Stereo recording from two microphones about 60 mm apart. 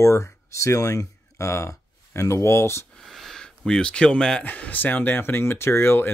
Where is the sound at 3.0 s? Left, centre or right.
Centre.